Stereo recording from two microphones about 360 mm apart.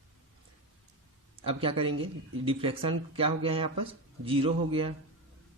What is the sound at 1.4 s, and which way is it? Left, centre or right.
Speech, centre.